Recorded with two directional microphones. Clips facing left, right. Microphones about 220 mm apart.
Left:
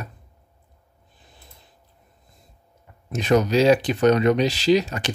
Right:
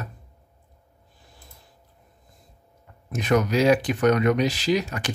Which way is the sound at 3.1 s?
25° left (ahead or behind).